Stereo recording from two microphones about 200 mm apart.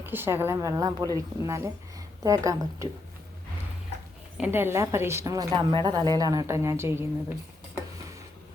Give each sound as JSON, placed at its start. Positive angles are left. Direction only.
{"t": 0.0, "sound": "a woman's voice", "side_deg": -10}
{"t": 4.4, "sound": "a woman's voice", "side_deg": -10}